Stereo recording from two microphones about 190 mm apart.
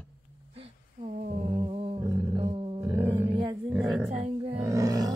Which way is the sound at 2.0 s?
30° right (ahead or behind).